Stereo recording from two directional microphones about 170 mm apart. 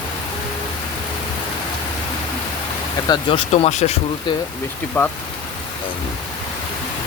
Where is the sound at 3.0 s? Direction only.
25° left (ahead or behind).